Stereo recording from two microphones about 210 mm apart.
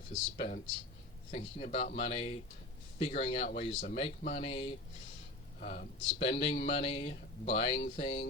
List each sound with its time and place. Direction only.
0.1 s speech: 35° left (ahead or behind)
5.5 s speech: 40° left (ahead or behind)
6.1 s speech: 25° left (ahead or behind)